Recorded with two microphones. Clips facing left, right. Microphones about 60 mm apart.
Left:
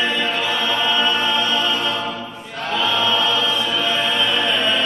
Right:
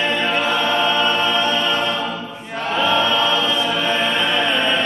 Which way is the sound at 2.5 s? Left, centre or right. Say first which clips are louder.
Right 3 dB; right.